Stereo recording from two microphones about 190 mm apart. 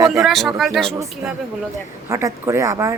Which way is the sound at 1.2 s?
15° right (ahead or behind).